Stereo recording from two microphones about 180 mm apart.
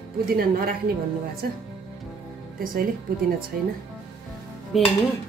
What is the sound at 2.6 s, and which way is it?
Speech, 55° right (ahead or behind).